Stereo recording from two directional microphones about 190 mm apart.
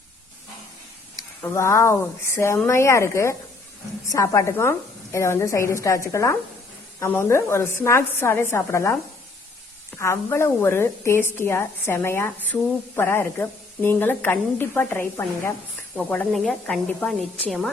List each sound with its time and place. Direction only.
1.4 s a woman's voice: 10° left (ahead or behind)
10.0 s a woman's voice: 15° left (ahead or behind)